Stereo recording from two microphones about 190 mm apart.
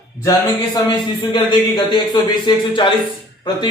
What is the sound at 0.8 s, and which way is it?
A man's voice, 25° left (ahead or behind).